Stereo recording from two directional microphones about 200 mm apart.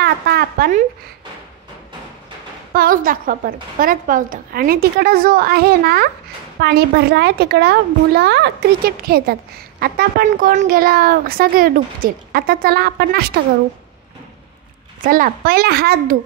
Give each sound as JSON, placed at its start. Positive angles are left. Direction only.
{"t": 0.0, "sound": "a sound", "side_deg": -50}
{"t": 2.7, "sound": "a child's voice", "side_deg": -45}
{"t": 15.0, "sound": "a child's voice", "side_deg": -45}